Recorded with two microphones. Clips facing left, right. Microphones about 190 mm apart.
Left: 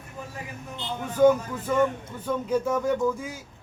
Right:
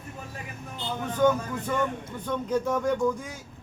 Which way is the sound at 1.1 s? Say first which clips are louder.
Left 4 dB; 10° left (ahead or behind).